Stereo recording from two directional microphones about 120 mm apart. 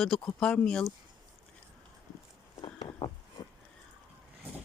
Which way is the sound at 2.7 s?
35° left (ahead or behind).